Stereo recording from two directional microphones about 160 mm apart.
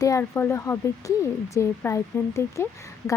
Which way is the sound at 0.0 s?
20° left (ahead or behind).